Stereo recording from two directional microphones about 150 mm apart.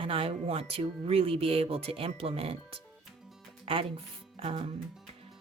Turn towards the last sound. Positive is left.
turn(degrees=-40)  # may be behind; listen again after turning